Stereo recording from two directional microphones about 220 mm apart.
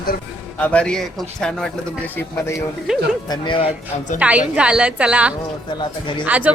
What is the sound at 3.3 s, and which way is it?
Speech, 20° left (ahead or behind).